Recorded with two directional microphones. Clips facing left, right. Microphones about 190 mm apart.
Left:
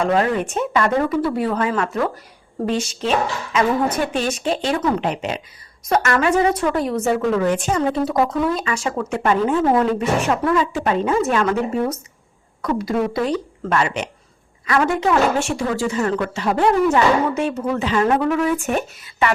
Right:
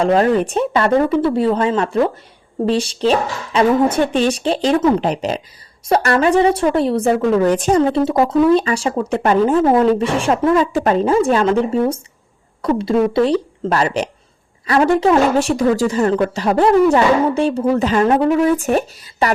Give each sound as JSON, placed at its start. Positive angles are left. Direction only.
{"t": 0.0, "sound": "a woman's voice", "side_deg": -35}
{"t": 10.6, "sound": "a woman's voice", "side_deg": -40}